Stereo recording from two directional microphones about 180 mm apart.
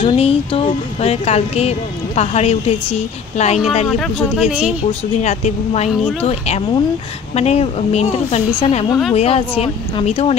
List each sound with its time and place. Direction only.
0.0 s speech: 30° left (ahead or behind)
3.8 s speech: centre (ahead or behind)
5.2 s speech: 40° left (ahead or behind)